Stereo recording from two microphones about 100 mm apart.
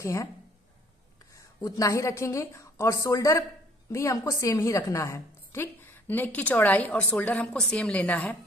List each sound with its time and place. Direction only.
0.0 s a woman's voice: 30° left (ahead or behind)
1.3 s a woman's voice: 35° left (ahead or behind); by 8.4 s 10° left (ahead or behind)